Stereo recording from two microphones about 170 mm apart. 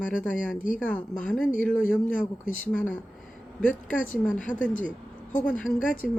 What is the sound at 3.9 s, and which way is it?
Speech, 50° left (ahead or behind).